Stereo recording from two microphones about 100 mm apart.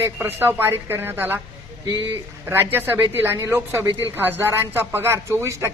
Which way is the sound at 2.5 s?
25° right (ahead or behind).